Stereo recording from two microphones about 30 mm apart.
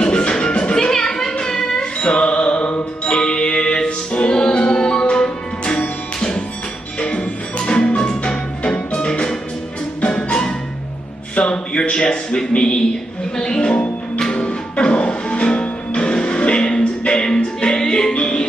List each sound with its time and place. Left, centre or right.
0.0 s music: left
0.9 s a sound: left
1.4 s music: centre
1.8 s music: left
7.0 s music: left
11.3 s a sound: left
13.4 s speech: left
14.3 s music: left
17.7 s music: left